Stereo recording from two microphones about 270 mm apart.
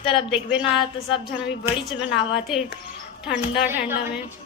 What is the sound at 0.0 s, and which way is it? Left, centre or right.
Speech, centre.